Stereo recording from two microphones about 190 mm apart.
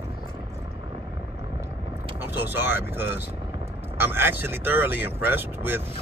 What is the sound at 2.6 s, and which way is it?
Speech, 10° right (ahead or behind).